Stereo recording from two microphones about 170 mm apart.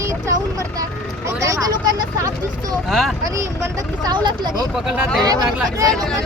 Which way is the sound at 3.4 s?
20° right (ahead or behind).